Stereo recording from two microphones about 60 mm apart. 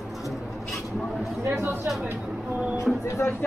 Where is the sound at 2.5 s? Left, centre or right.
Centre.